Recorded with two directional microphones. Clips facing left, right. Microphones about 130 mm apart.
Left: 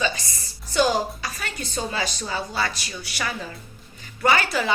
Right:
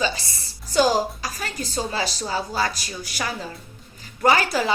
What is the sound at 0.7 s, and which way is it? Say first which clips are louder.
A woman's voice: right 2 dB; 40° right (ahead or behind).